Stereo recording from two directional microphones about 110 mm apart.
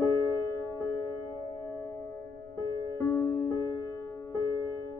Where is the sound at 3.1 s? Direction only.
20° left (ahead or behind).